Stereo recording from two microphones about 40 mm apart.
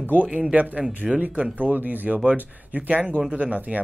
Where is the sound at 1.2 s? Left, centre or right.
Right.